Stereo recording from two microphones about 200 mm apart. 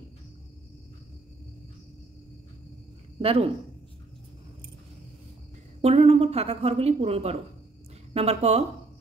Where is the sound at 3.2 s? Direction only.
30° right (ahead or behind).